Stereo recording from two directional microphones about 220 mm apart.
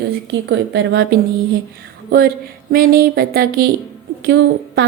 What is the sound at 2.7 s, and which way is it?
A woman's voice, 40° right (ahead or behind).